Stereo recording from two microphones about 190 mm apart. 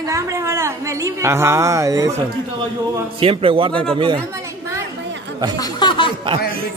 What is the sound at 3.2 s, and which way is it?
Speech, 30° right (ahead or behind).